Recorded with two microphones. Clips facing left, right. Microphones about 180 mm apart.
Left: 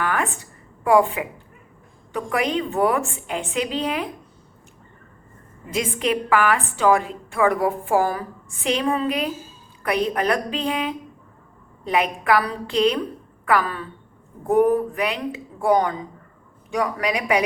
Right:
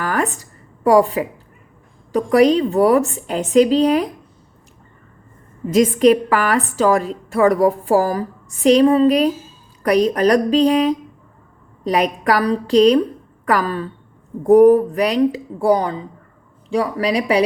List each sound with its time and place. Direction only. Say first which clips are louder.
0.0 s a sound: right 4 dB; 40° right (ahead or behind)
0.9 s a woman's voice: right 4 dB; 40° right (ahead or behind)
5.7 s a woman's voice: right 11 dB; 40° right (ahead or behind)